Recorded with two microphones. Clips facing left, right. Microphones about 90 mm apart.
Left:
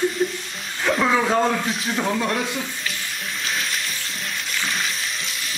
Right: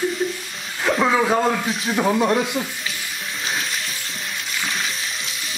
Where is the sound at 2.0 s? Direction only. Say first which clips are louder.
Right 6 dB; 20° right (ahead or behind).